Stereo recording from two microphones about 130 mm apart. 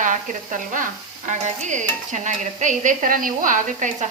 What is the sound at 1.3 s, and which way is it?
Stir, 70° right (ahead or behind).